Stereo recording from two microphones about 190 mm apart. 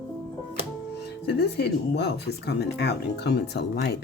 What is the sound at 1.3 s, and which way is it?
Speech, 60° left (ahead or behind).